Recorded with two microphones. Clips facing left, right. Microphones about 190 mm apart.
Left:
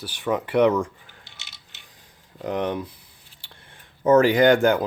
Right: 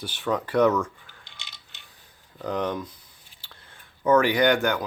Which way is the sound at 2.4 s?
25° left (ahead or behind).